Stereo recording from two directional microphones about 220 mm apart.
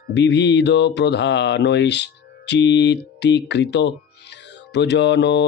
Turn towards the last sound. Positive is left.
turn(degrees=50)  # may be behind; listen again after turning